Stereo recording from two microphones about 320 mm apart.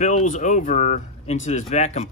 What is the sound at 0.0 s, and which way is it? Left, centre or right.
Speech, left.